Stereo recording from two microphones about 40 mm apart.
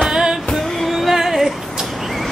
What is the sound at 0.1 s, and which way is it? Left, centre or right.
Music, centre.